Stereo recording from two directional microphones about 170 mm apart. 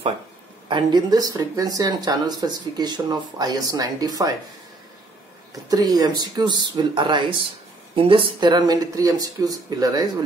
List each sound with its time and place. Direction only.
0.7 s speech: 25° right (ahead or behind)
5.5 s speech: 20° right (ahead or behind)